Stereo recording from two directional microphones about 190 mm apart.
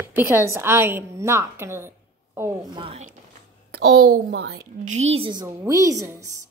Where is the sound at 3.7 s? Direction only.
55° right (ahead or behind).